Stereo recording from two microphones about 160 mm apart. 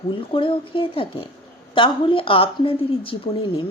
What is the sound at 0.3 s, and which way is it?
A woman's voice, 35° left (ahead or behind).